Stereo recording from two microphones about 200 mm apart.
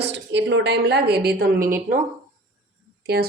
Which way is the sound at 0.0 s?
60° right (ahead or behind).